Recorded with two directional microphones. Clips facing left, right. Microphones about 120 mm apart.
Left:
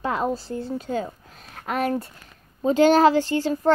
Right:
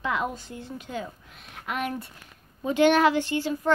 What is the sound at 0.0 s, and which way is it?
Speech, 35° left (ahead or behind).